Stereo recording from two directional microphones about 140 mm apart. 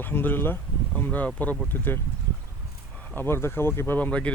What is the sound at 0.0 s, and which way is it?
Speech, 15° left (ahead or behind).